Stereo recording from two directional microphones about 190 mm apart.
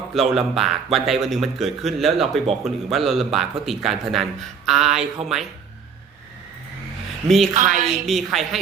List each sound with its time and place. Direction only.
0.1 s speech: centre (ahead or behind)
7.3 s speech: centre (ahead or behind)
7.5 s a woman's voice: 40° right (ahead or behind)
8.0 s speech: centre (ahead or behind)